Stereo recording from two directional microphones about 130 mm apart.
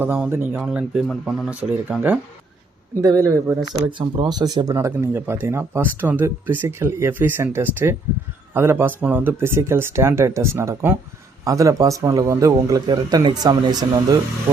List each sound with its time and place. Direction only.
0.0 s a man's voice: 15° right (ahead or behind)
3.0 s speech: 25° right (ahead or behind)
3.8 s speech: 40° right (ahead or behind)